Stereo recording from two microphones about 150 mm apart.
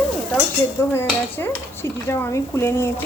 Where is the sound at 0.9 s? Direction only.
15° left (ahead or behind).